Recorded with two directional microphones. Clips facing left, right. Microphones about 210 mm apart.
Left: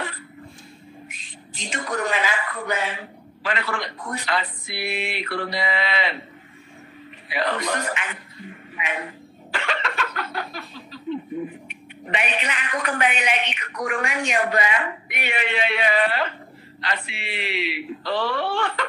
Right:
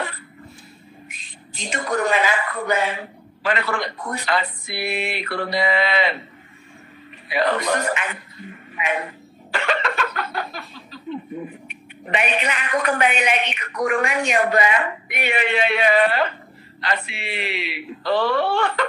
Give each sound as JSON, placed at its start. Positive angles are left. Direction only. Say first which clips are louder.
{"t": 1.8, "sound": "a man's voice", "louder": "right 4 dB", "side_deg": -60}
{"t": 4.4, "sound": "a man's voice", "louder": "right 3 dB", "side_deg": -40}
{"t": 7.2, "sound": "a man's voice", "louder": "right 4 dB", "side_deg": -50}
{"t": 9.5, "sound": "a sound", "louder": "right 5 dB", "side_deg": -50}
{"t": 11.6, "sound": "a man's voice", "louder": "even", "side_deg": -50}